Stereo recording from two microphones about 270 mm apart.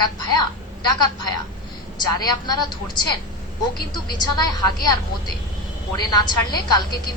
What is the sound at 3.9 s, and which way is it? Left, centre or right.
Speech, centre.